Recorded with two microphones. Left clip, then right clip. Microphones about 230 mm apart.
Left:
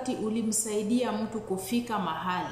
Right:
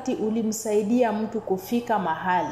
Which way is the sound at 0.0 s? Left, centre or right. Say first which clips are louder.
Right 5 dB; centre.